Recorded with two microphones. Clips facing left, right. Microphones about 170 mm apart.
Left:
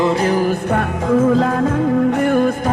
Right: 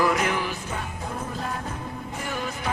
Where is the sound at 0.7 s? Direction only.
90° left.